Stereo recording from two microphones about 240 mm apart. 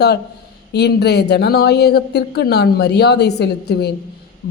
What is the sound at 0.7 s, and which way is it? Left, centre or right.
Speech, left.